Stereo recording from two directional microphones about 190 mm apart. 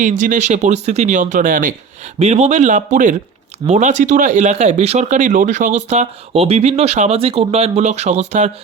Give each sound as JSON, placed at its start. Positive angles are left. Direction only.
{"t": 0.0, "sound": "speech", "side_deg": -40}
{"t": 2.1, "sound": "speech", "side_deg": -35}